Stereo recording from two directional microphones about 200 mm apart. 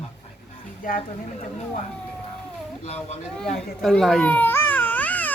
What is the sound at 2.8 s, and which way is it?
Speech, 30° left (ahead or behind).